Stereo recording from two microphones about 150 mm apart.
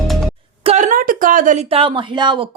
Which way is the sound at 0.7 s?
55° right (ahead or behind).